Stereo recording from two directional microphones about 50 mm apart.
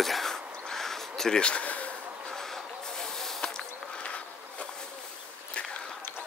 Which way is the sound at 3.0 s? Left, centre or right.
Centre.